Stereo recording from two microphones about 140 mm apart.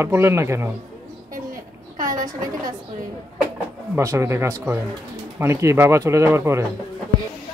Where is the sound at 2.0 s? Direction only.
75° right (ahead or behind).